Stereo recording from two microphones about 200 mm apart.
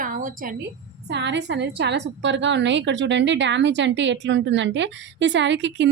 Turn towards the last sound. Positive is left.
turn(degrees=-65)  # may be behind; listen again after turning